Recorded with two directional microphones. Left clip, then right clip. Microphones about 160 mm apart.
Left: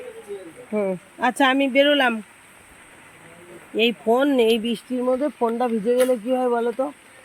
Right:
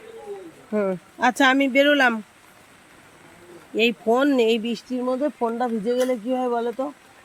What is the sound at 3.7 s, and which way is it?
Speech, 5° right (ahead or behind).